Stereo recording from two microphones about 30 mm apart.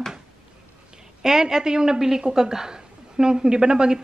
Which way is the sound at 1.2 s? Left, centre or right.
Centre.